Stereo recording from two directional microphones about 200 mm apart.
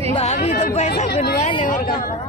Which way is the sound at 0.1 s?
30° left (ahead or behind).